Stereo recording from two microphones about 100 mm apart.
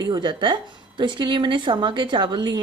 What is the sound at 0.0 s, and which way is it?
A woman's voice, 50° right (ahead or behind).